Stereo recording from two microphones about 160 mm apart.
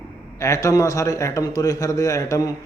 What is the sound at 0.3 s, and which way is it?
Speech, 20° left (ahead or behind).